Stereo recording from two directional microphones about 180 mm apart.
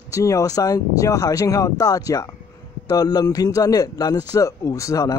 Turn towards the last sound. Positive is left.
turn(degrees=20)  # may be behind; listen again after turning